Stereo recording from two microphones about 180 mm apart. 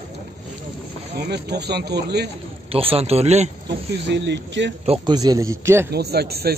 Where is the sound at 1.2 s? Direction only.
65° right (ahead or behind).